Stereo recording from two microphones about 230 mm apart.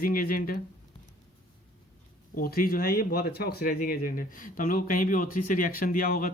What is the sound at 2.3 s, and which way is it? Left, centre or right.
Speech, left.